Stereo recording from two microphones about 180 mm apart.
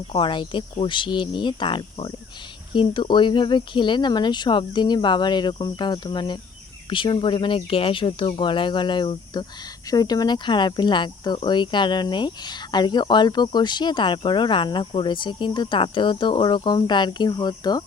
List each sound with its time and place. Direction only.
0.1 s speech: 25° left (ahead or behind)